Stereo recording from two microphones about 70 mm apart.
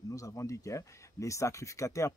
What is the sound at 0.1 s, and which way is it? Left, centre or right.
Speech, left.